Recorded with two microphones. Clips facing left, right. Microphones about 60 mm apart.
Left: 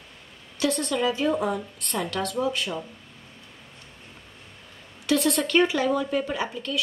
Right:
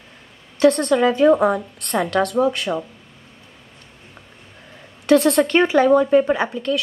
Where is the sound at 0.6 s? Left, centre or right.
Right.